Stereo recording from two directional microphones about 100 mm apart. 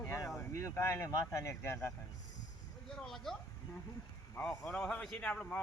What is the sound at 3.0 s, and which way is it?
Speech, 5° left (ahead or behind).